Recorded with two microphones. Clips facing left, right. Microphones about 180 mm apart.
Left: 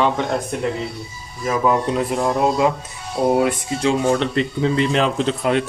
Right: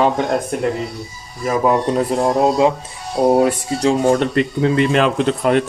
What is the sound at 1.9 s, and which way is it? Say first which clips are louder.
Speech: right 3 dB; 35° right (ahead or behind).